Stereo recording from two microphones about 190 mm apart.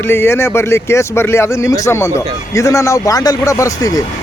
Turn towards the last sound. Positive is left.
turn(degrees=20)  # may be behind; listen again after turning